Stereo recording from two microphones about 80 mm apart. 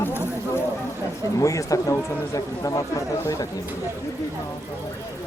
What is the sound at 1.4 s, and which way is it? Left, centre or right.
A man's voice, left.